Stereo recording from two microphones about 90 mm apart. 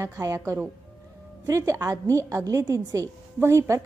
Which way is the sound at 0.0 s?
35° right (ahead or behind).